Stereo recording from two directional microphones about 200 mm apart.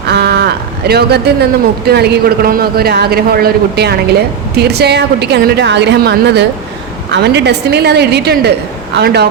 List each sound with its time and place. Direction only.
0.1 s a woman's voice: 55° right (ahead or behind)